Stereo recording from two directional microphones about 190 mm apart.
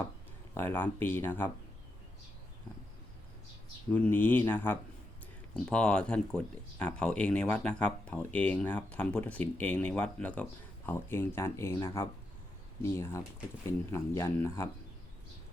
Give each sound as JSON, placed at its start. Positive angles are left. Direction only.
{"t": 0.5, "sound": "speech", "side_deg": 10}
{"t": 3.9, "sound": "speech", "side_deg": 10}